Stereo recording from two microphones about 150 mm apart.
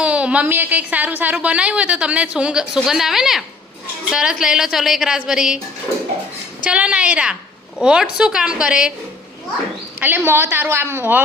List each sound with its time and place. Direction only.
0.0 s a woman's voice: 10° right (ahead or behind)
6.7 s a woman's voice: 5° right (ahead or behind)
10.0 s a woman's voice: 15° right (ahead or behind)